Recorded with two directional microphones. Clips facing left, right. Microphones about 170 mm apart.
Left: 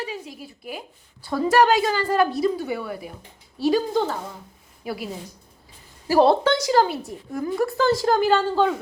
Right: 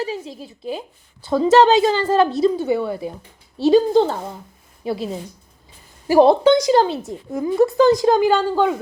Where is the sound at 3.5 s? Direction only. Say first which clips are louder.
Right 7 dB; 25° right (ahead or behind).